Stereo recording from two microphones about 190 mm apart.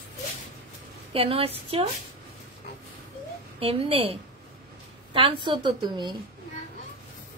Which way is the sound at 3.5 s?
30° right (ahead or behind).